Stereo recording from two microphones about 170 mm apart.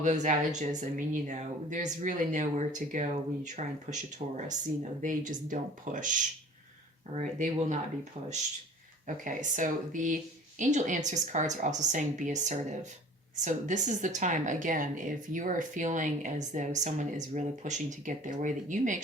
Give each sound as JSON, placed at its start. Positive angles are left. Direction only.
{"t": 0.0, "sound": "speech", "side_deg": -45}
{"t": 9.0, "sound": "speech", "side_deg": -50}